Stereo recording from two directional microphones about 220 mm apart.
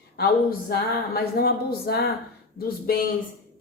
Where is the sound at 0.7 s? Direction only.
45° left (ahead or behind).